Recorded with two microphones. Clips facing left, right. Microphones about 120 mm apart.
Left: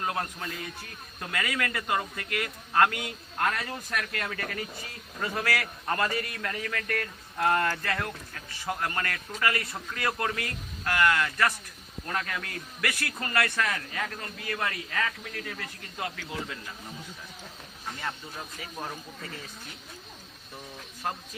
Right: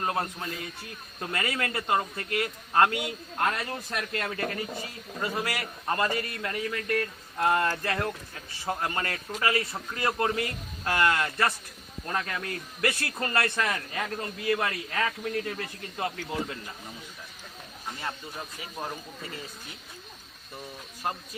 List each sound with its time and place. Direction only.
0.0 s a man's voice: 25° right (ahead or behind)
5.2 s a man's voice: 20° right (ahead or behind)
18.0 s speech: 5° right (ahead or behind)